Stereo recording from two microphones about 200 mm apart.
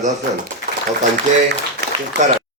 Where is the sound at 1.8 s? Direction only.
55° right (ahead or behind).